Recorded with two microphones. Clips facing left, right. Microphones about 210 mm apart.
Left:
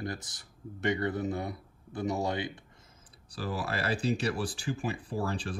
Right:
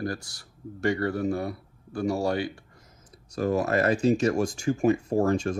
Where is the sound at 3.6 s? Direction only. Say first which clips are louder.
Right 8 dB; 30° left (ahead or behind).